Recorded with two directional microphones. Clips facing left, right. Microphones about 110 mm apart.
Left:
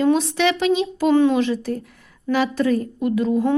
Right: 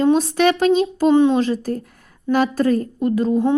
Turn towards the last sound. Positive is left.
turn(degrees=-35)  # may be behind; listen again after turning